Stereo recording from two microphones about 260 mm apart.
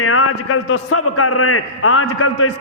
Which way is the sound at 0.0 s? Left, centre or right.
Left.